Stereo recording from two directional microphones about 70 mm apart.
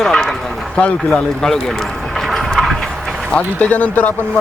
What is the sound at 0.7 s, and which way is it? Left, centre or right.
Speech, centre.